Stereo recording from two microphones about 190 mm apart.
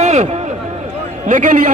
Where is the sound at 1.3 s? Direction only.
40° right (ahead or behind).